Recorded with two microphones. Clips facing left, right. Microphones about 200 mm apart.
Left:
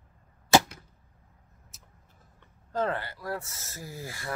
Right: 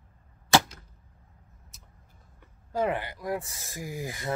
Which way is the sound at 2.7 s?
10° right (ahead or behind).